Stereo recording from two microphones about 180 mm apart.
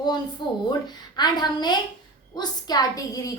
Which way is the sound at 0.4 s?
25° left (ahead or behind).